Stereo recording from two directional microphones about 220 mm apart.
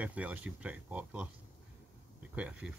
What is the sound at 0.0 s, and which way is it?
Speech, 5° right (ahead or behind).